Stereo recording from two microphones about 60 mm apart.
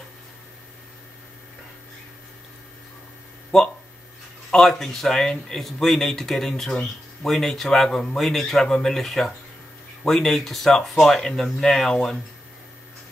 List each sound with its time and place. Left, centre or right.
3.5 s speech: centre